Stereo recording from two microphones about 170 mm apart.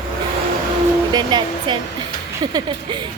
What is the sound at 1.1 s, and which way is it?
Speech, 25° right (ahead or behind).